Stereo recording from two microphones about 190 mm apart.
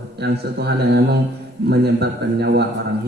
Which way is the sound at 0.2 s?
60° right (ahead or behind).